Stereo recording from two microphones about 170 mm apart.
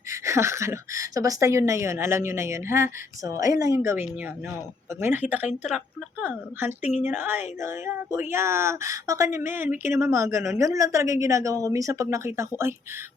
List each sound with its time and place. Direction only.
0.1 s a woman's voice: 15° right (ahead or behind)
6.2 s a woman's voice: 10° right (ahead or behind)